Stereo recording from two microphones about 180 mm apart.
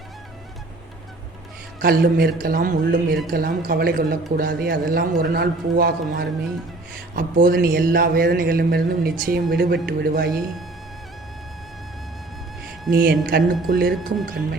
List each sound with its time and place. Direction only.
1.8 s speech: 60° right (ahead or behind)
12.9 s speech: 60° right (ahead or behind)